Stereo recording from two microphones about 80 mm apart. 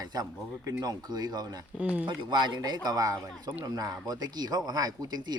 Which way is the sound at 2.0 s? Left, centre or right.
Right.